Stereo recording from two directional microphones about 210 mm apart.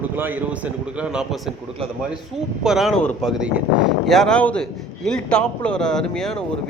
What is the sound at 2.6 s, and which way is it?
A man's voice, centre (ahead or behind).